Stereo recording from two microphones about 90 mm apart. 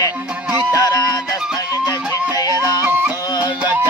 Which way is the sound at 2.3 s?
45° left (ahead or behind).